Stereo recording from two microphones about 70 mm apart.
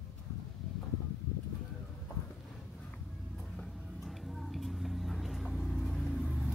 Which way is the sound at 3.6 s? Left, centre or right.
Centre.